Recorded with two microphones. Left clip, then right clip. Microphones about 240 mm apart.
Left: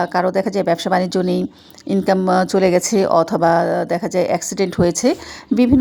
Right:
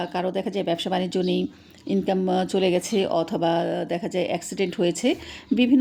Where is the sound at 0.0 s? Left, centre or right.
Left.